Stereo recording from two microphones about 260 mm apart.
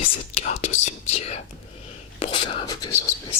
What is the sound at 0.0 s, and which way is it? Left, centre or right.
Speech, left.